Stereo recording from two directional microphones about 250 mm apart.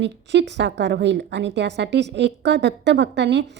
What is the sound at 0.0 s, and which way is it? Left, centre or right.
A woman's voice, right.